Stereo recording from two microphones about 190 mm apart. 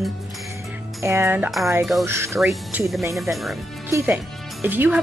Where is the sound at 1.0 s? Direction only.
15° right (ahead or behind).